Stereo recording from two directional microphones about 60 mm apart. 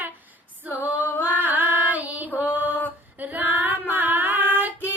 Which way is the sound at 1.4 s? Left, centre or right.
Right.